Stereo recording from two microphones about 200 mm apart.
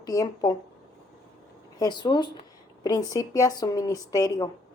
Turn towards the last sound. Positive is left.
turn(degrees=15)  # may be behind; listen again after turning